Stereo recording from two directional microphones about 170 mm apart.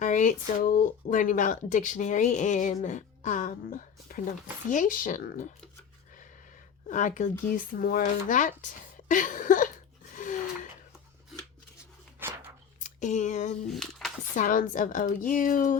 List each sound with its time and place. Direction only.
0.0 s speech: 45° left (ahead or behind)
6.8 s speech: 45° left (ahead or behind)
10.2 s gasp: 50° left (ahead or behind)
12.2 s a sound: 15° right (ahead or behind)
12.8 s speech: 45° left (ahead or behind)
13.7 s speech: centre (ahead or behind)
14.3 s speech: 50° left (ahead or behind)